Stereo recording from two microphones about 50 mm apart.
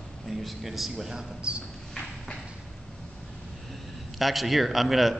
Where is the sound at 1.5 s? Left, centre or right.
Centre.